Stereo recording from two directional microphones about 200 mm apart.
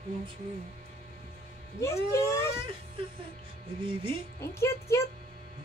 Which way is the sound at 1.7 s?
15° left (ahead or behind).